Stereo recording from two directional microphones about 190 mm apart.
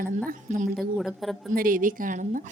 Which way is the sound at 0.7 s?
Centre (ahead or behind).